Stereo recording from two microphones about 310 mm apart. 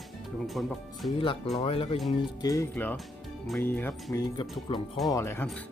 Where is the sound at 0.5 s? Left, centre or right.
Centre.